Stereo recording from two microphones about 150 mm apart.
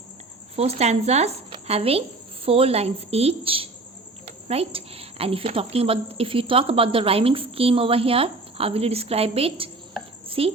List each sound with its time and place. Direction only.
0.5 s a woman's voice: 45° right (ahead or behind)
10.2 s cricket: 40° right (ahead or behind)